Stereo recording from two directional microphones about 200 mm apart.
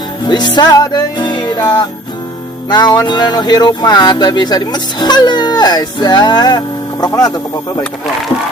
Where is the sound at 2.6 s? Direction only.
20° left (ahead or behind).